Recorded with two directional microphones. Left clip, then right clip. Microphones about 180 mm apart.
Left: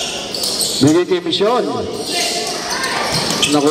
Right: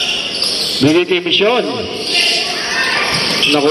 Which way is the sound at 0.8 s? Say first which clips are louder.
Right 1 dB; 40° right (ahead or behind).